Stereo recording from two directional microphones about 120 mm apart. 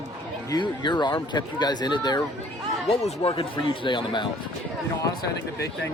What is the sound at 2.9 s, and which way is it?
Speech, 55° left (ahead or behind).